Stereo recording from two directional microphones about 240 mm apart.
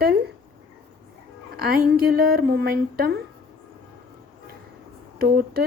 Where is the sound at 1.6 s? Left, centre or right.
Right.